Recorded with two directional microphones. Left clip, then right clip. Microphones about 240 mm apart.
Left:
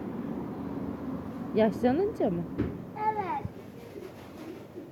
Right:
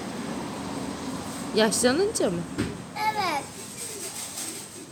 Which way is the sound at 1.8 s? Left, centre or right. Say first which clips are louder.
Right 4 dB; centre.